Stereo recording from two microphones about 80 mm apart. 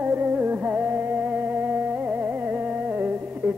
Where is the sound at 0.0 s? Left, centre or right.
Right.